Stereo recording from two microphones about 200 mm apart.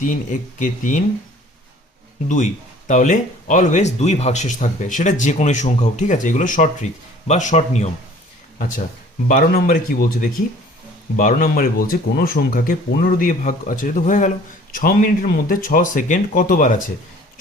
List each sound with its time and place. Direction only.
0.0 s speech: 40° left (ahead or behind)
2.2 s speech: 40° left (ahead or behind)